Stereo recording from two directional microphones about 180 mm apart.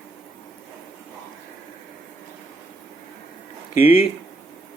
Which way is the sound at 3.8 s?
30° left (ahead or behind).